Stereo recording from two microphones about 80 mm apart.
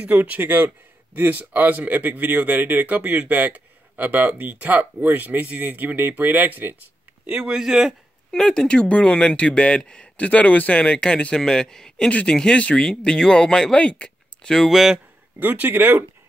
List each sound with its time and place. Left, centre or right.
0.0 s speech: centre
7.2 s a man's voice: centre
8.3 s speech: centre
15.3 s speech: right